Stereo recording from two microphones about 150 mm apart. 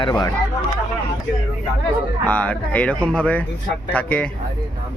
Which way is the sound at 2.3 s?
10° left (ahead or behind).